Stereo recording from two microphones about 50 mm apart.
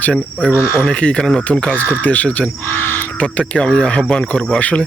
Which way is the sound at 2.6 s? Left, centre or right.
Left.